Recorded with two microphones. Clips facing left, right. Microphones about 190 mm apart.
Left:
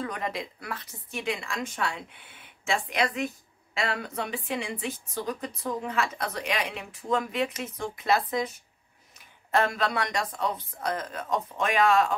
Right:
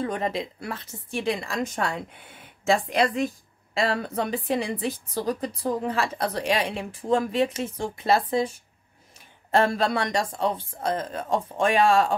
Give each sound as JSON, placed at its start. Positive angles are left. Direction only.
{"t": 0.0, "sound": "a woman's voice", "side_deg": -25}